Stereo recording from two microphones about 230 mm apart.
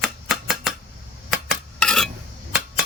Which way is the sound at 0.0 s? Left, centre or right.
Centre.